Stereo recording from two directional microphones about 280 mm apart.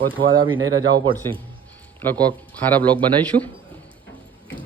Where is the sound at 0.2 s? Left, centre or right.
Centre.